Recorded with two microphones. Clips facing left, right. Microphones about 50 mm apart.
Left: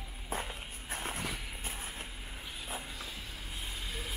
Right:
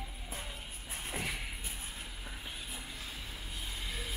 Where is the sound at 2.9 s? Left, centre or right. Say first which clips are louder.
Left 1 dB; left.